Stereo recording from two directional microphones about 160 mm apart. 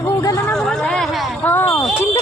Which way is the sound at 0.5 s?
5° left (ahead or behind).